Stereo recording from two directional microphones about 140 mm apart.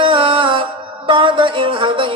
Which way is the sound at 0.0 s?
40° right (ahead or behind).